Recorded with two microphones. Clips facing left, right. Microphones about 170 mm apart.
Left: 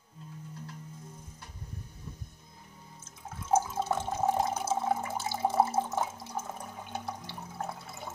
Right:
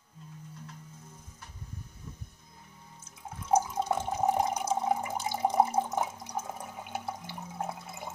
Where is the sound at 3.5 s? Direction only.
15° right (ahead or behind).